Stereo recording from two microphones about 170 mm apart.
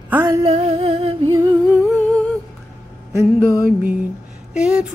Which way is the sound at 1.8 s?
5° left (ahead or behind).